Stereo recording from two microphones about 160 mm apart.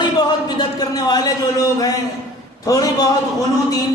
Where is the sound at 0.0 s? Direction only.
25° left (ahead or behind).